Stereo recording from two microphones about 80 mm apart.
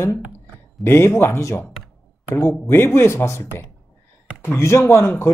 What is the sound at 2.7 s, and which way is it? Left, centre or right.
Speech, left.